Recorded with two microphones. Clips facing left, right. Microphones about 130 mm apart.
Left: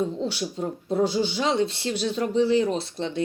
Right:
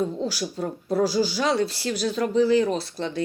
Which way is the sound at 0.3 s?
30° left (ahead or behind).